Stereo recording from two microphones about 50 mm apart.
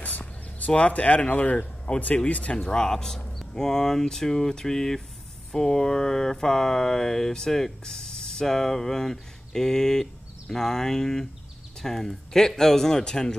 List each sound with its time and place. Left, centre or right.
0.0 s speech: left; by 13.3 s centre